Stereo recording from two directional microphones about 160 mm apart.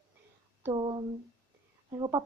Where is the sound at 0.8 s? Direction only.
30° right (ahead or behind).